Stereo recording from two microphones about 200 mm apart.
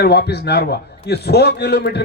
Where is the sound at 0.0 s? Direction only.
55° left (ahead or behind).